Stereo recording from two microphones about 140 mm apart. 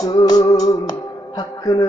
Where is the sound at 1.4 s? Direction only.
30° left (ahead or behind).